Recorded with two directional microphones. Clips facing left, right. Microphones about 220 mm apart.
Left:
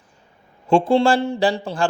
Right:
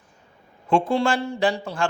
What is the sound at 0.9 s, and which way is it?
Speech, 30° left (ahead or behind).